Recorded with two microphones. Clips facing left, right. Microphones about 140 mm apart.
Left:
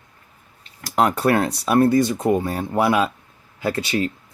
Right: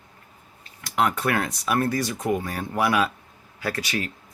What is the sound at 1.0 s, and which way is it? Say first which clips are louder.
Speech: left 5 dB; 35° left (ahead or behind).